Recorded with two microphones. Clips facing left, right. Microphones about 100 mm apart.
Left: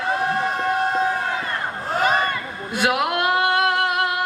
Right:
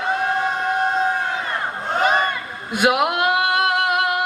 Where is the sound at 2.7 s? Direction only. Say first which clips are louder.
Right 3 dB; 20° right (ahead or behind).